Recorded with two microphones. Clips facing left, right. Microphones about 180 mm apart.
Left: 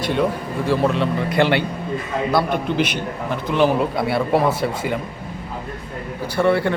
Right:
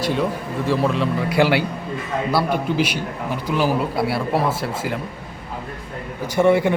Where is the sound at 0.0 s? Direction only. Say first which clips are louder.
Left 1 dB; centre (ahead or behind).